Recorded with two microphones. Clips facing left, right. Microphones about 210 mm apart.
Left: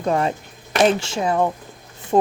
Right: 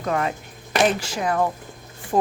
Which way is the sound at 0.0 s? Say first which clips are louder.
Left 4 dB; 30° left (ahead or behind).